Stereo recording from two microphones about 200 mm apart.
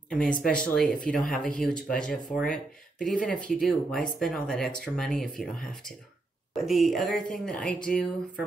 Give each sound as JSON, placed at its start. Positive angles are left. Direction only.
{"t": 0.1, "sound": "speech", "side_deg": 5}